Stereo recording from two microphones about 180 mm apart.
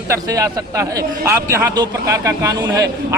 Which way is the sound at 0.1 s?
15° right (ahead or behind).